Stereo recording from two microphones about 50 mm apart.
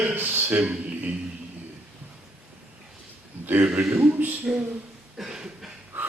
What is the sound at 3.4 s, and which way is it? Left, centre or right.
Speech, right.